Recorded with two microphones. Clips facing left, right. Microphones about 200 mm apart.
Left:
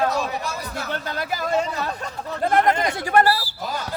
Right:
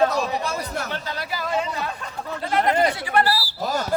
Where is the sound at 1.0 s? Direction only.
50° left (ahead or behind).